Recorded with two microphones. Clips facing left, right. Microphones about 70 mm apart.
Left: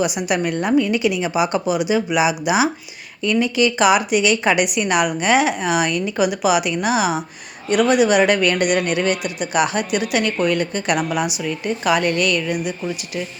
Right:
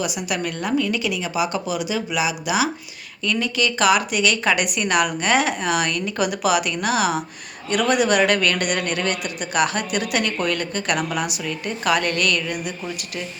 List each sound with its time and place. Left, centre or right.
0.0 s a woman's voice: left; by 12.7 s centre